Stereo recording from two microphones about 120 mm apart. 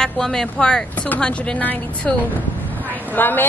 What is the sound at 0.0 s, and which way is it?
Speech, 5° left (ahead or behind).